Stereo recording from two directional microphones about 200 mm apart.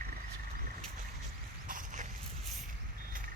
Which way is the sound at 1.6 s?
45° right (ahead or behind).